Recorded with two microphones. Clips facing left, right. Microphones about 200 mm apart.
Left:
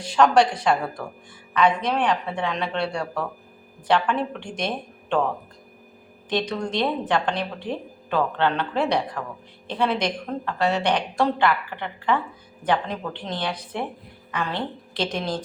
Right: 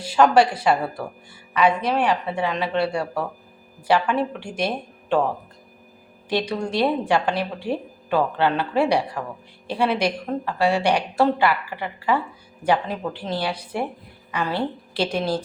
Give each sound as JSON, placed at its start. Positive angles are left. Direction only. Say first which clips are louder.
{"t": 0.0, "sound": "a woman's voice", "louder": "right 1 dB", "side_deg": -5}